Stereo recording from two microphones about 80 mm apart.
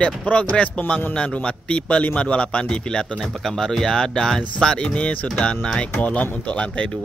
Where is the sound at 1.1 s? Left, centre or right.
Centre.